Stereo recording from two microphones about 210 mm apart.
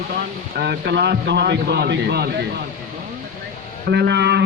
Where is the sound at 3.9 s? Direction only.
55° right (ahead or behind).